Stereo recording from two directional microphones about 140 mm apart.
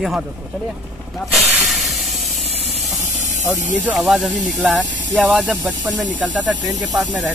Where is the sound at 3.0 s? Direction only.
60° right (ahead or behind).